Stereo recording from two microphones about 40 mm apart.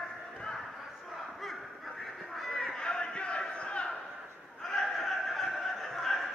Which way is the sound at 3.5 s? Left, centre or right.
Left.